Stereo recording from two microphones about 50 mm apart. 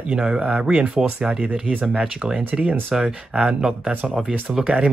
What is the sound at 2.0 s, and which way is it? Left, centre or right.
Speech, centre.